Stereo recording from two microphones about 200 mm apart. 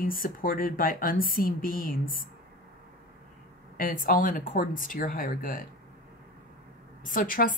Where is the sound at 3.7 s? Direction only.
45° left (ahead or behind).